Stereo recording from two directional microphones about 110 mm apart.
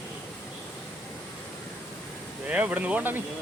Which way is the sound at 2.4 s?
15° right (ahead or behind).